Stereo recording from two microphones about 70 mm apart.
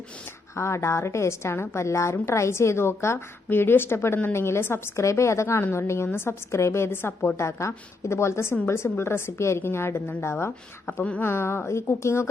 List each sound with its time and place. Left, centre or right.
0.5 s a woman's voice: left